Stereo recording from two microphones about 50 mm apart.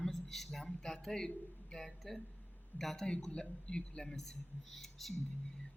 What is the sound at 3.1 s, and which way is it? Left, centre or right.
Speech, centre.